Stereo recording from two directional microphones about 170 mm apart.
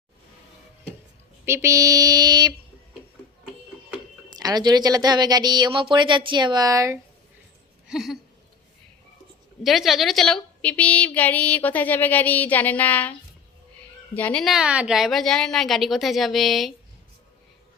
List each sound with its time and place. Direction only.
1.5 s speech: 15° right (ahead or behind)
4.4 s speech: 25° right (ahead or behind)
7.9 s a sound: centre (ahead or behind)
9.6 s a woman's voice: centre (ahead or behind)